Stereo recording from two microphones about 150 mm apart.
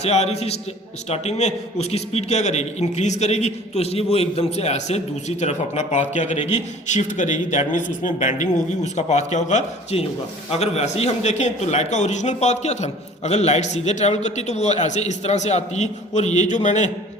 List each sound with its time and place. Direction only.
0.0 s a man's voice: 45° left (ahead or behind)